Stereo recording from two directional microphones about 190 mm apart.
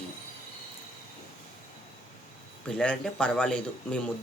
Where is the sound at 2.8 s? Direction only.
5° left (ahead or behind).